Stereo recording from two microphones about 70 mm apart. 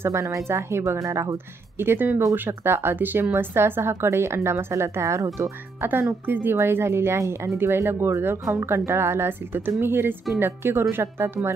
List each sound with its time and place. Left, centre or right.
0.0 s speech: right
1.8 s speech: right
5.8 s speech: right